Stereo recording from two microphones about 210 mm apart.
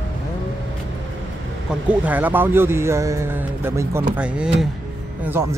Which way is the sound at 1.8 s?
5° right (ahead or behind).